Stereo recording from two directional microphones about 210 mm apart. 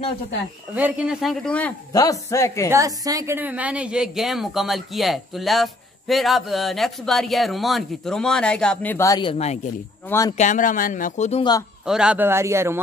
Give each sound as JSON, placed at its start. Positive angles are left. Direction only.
{"t": 0.7, "sound": "a woman's voice", "side_deg": -5}
{"t": 1.9, "sound": "speech", "side_deg": 15}
{"t": 2.7, "sound": "a woman's voice", "side_deg": -15}
{"t": 10.0, "sound": "speech", "side_deg": 15}
{"t": 10.3, "sound": "speech", "side_deg": 35}
{"t": 11.8, "sound": "speech", "side_deg": -5}